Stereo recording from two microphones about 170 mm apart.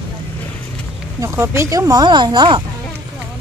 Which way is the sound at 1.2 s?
15° right (ahead or behind).